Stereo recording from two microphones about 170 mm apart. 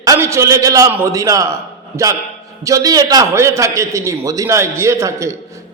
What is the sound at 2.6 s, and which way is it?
A man's voice, 20° right (ahead or behind).